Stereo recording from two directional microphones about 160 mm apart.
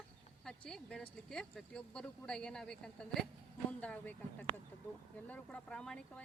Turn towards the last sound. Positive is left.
turn(degrees=5)  # may be behind; listen again after turning